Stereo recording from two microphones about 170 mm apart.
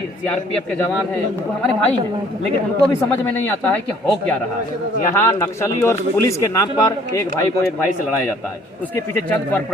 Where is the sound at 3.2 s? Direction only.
10° left (ahead or behind).